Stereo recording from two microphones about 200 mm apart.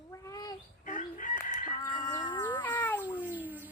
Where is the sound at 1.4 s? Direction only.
40° left (ahead or behind).